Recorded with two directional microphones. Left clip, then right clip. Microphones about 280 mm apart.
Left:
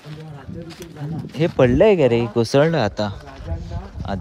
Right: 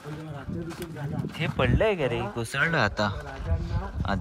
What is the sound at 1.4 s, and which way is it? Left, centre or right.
Speech, left.